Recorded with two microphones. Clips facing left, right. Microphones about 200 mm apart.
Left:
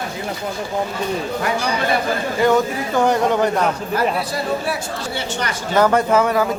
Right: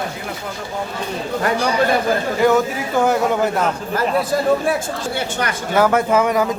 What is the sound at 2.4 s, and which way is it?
Speech, 5° right (ahead or behind).